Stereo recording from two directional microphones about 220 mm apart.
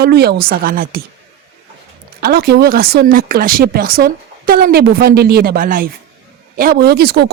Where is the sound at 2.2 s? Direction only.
45° right (ahead or behind).